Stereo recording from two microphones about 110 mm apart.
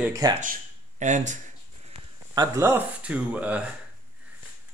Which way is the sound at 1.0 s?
90° right.